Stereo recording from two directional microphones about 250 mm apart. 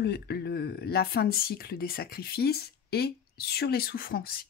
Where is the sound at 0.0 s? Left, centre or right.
Left.